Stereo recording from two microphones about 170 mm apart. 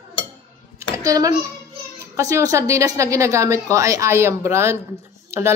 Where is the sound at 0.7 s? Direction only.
20° right (ahead or behind).